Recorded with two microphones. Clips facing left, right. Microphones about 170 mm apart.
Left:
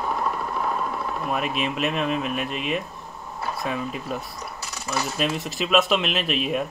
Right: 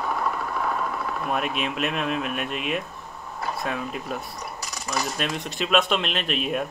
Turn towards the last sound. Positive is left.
turn(degrees=0)  # may be behind; listen again after turning